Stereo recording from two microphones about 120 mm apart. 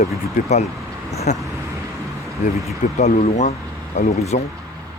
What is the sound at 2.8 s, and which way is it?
Speech, 70° left (ahead or behind).